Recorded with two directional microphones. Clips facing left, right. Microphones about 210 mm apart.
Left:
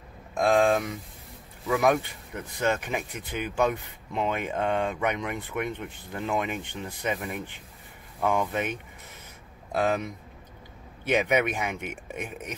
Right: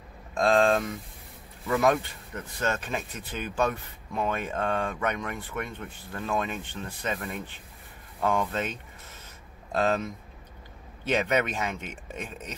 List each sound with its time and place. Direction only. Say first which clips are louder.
0.3 s speech: even; 10° left (ahead or behind)